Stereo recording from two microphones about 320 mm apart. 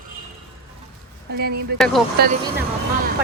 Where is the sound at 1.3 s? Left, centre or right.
Right.